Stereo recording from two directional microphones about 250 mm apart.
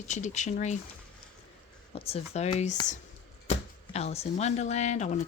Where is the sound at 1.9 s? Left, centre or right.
Left.